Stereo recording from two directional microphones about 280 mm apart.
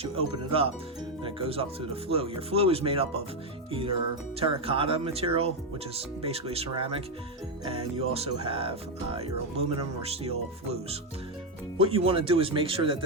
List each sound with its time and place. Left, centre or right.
0.0 s speech: centre
2.0 s speech: centre
11.8 s speech: centre